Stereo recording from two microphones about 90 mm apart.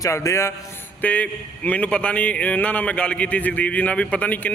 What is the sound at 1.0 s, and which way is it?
A man's voice, 15° left (ahead or behind).